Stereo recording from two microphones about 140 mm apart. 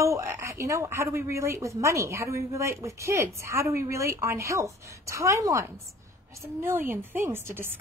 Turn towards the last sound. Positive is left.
turn(degrees=-15)  # may be behind; listen again after turning